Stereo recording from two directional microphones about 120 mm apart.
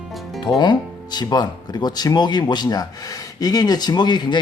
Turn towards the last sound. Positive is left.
turn(degrees=35)  # may be behind; listen again after turning